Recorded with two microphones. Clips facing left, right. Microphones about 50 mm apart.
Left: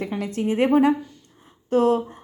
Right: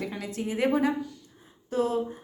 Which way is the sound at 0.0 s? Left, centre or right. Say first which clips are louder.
Left 7 dB; left.